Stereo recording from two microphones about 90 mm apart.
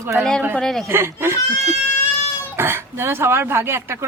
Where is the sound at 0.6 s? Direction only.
5° left (ahead or behind).